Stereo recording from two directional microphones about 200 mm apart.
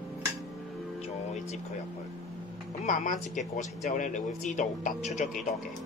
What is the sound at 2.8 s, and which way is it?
Speech, 40° left (ahead or behind).